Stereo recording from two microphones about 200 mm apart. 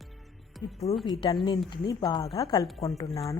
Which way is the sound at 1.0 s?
20° left (ahead or behind).